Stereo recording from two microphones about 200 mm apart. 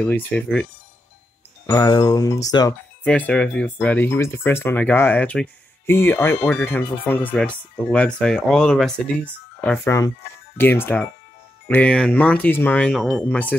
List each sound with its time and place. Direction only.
0.0 s speech: 5° left (ahead or behind)
1.7 s speech: 20° left (ahead or behind)
3.0 s speech: 10° left (ahead or behind)